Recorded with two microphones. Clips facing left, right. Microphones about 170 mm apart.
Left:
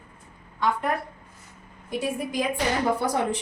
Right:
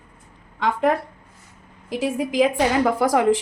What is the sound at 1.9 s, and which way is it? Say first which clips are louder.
A woman's voice: right 5 dB; 90° right.